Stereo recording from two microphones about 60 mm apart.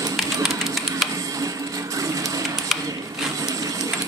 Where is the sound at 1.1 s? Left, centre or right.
Right.